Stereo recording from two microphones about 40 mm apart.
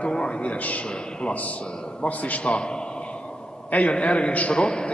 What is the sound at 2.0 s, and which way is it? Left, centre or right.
Speech, left.